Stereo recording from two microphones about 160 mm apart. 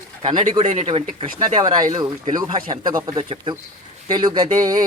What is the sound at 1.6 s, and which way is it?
Speech, 25° right (ahead or behind).